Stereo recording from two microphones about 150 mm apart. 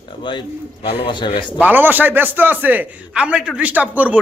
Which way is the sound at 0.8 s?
35° left (ahead or behind).